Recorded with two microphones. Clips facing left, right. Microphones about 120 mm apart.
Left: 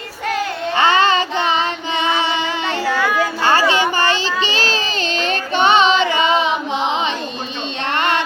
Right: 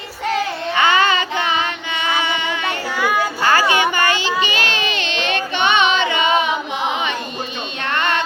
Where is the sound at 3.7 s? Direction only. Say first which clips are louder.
Even; 30° left (ahead or behind).